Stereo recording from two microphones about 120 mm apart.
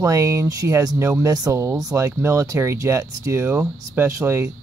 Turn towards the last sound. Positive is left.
turn(degrees=-25)  # may be behind; listen again after turning